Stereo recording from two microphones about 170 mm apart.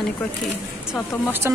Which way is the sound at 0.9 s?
10° right (ahead or behind).